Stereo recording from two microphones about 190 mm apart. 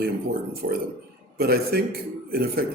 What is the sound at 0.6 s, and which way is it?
Speech, 70° right (ahead or behind).